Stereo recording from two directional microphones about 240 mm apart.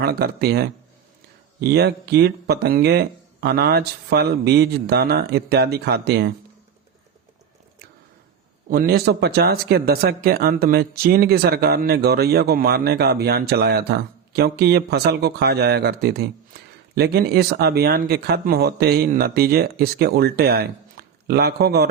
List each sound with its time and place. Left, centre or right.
0.0 s speech: right
8.7 s speech: right